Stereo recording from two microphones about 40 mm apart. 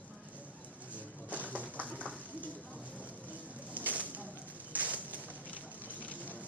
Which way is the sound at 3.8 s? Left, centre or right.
Left.